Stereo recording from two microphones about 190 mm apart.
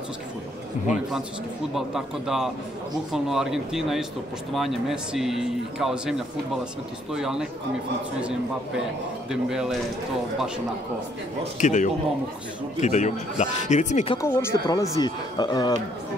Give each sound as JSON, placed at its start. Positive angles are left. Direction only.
{"t": 1.7, "sound": "a man's voice", "side_deg": 0}
{"t": 11.6, "sound": "speech", "side_deg": 40}
{"t": 14.2, "sound": "speech", "side_deg": 15}